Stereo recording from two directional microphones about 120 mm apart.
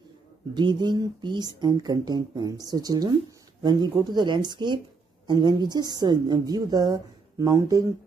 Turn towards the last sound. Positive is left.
turn(degrees=-30)  # may be behind; listen again after turning